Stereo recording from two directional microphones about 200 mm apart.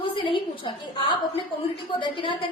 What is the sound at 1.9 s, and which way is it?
Speech, 25° left (ahead or behind).